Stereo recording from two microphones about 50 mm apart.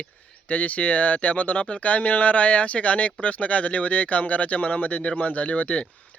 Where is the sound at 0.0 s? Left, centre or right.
Left.